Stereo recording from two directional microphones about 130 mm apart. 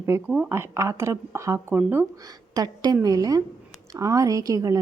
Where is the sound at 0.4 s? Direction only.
20° right (ahead or behind).